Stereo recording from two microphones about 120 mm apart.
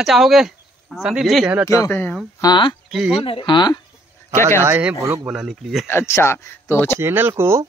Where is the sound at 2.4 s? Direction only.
40° left (ahead or behind).